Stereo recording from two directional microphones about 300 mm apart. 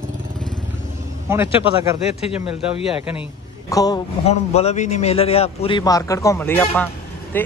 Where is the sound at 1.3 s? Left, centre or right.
Centre.